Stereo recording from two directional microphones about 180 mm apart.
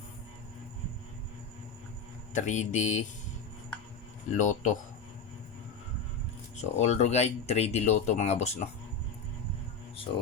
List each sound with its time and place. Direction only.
2.3 s speech: 40° left (ahead or behind)
4.4 s speech: 45° left (ahead or behind)
6.6 s speech: 40° left (ahead or behind)